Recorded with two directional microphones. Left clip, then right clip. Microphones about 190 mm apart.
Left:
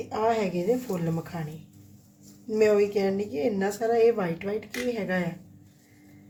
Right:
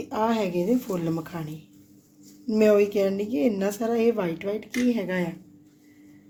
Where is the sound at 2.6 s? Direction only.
40° right (ahead or behind).